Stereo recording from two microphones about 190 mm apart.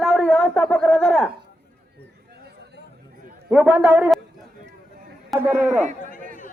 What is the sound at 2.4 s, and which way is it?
Chatter, 60° right (ahead or behind).